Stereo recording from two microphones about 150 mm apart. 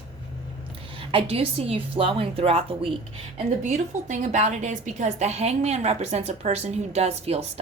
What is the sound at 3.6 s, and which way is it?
A woman's voice, 55° right (ahead or behind).